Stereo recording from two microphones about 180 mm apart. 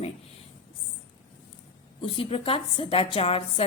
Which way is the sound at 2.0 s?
30° left (ahead or behind).